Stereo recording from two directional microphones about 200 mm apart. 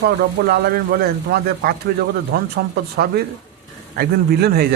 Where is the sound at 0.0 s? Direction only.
50° right (ahead or behind).